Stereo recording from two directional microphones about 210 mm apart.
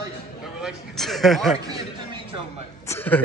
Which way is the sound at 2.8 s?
10° left (ahead or behind).